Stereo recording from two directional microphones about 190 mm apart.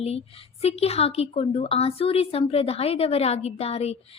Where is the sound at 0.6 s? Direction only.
30° left (ahead or behind).